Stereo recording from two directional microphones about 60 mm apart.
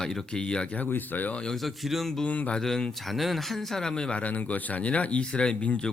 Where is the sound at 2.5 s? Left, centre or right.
Centre.